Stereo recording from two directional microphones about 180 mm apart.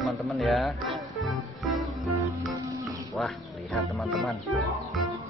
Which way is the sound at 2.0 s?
15° right (ahead or behind).